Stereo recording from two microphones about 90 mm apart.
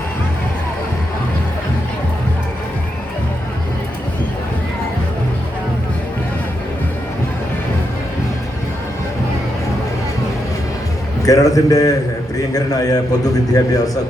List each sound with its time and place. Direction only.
11.3 s a man's voice: 40° left (ahead or behind)